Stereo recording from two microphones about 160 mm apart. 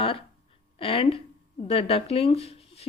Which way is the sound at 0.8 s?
35° left (ahead or behind).